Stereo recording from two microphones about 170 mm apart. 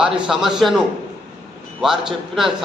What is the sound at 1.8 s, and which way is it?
Speech, centre (ahead or behind).